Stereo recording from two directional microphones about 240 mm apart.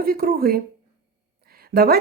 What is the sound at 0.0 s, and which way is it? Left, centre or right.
A woman's voice, right.